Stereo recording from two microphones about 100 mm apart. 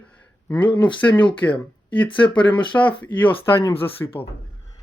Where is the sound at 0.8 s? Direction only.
15° left (ahead or behind).